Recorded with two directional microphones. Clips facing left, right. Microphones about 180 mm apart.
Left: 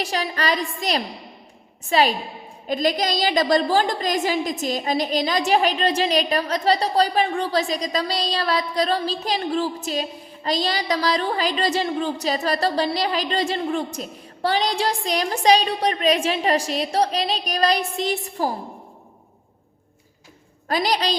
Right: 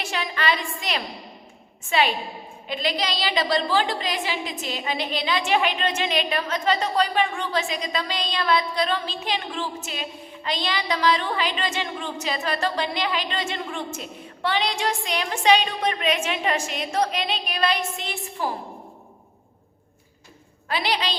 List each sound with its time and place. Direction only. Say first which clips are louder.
0.0 s a woman's voice: left 2 dB; 40° left (ahead or behind)
20.7 s a woman's voice: left 4 dB; 40° left (ahead or behind)